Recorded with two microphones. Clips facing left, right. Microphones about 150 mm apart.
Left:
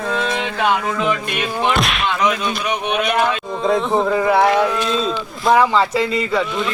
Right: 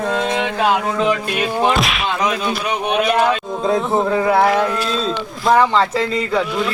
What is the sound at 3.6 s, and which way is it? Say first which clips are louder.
Speech: left 2 dB; centre (ahead or behind).